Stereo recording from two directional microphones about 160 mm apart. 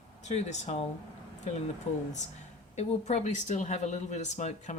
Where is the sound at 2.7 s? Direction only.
45° left (ahead or behind).